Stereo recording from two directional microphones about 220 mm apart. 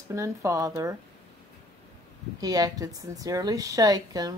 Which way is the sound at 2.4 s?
15° right (ahead or behind).